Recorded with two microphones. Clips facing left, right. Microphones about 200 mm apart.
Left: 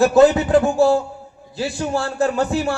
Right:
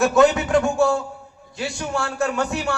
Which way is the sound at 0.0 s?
35° left (ahead or behind).